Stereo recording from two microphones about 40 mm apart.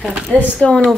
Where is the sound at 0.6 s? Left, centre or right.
Left.